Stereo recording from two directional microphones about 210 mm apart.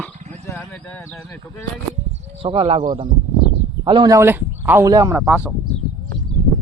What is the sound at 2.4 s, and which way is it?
Speech, 25° right (ahead or behind).